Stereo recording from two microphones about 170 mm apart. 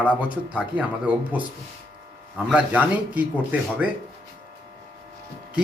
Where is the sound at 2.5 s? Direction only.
10° right (ahead or behind).